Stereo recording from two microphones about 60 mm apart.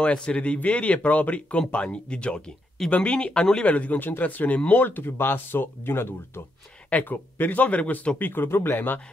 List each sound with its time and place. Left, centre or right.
0.0 s speech: centre; by 6.4 s left
6.9 s speech: left
8.2 s speech: left